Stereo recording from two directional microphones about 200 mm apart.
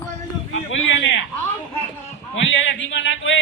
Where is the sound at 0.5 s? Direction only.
75° left (ahead or behind).